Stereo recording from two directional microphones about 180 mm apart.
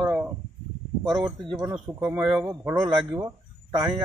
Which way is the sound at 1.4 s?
25° right (ahead or behind).